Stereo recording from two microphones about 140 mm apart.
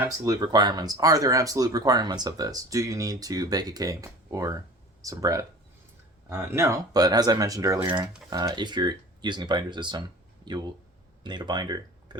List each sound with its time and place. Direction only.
0.0 s speech: 25° right (ahead or behind)
11.2 s speech: 30° right (ahead or behind)